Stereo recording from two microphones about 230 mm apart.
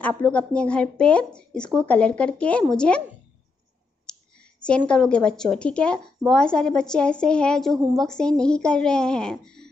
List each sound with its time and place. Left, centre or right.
0.0 s a woman's voice: centre
4.0 s a woman's voice: centre